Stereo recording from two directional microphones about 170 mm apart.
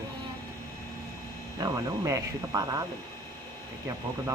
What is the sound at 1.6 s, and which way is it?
Speech, 20° right (ahead or behind).